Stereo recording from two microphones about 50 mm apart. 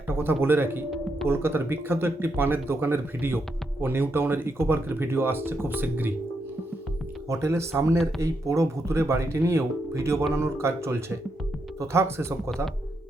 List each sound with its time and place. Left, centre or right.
0.1 s speech: right
7.3 s speech: right